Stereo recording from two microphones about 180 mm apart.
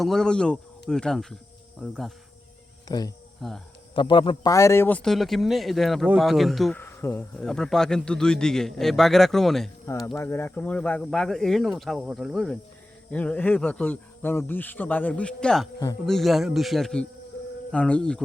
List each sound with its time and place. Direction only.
0.0 s speech: centre (ahead or behind)
2.8 s speech: 20° left (ahead or behind)
3.4 s speech: centre (ahead or behind)
3.9 s speech: 25° left (ahead or behind)
4.5 s speech: 15° left (ahead or behind)
6.7 s speech: 15° left (ahead or behind)
10.2 s speech: 10° left (ahead or behind)